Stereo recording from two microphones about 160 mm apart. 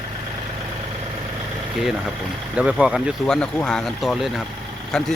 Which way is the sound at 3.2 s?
5° left (ahead or behind).